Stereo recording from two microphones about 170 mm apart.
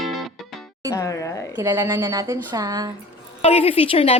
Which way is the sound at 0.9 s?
15° left (ahead or behind).